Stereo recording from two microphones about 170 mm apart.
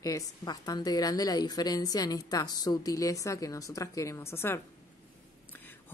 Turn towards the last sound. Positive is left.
turn(degrees=10)  # may be behind; listen again after turning